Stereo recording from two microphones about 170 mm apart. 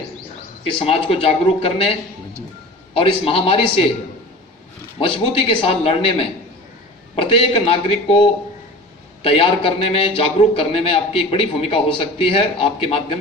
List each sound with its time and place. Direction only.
0.8 s a man's voice: 35° left (ahead or behind)
4.9 s a man's voice: 30° left (ahead or behind)